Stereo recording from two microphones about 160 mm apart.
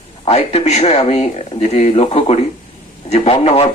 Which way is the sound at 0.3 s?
40° left (ahead or behind).